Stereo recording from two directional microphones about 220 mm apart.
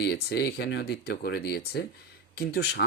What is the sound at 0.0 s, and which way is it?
Speech, 50° left (ahead or behind).